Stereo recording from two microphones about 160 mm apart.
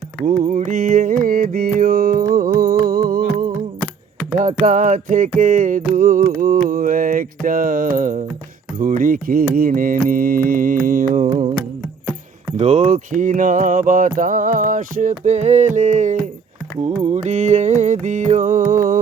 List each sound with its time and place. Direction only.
0.2 s music: 55° right (ahead or behind)
4.4 s mantra: 50° right (ahead or behind)
12.5 s mantra: 45° right (ahead or behind)
14.2 s music: 55° right (ahead or behind)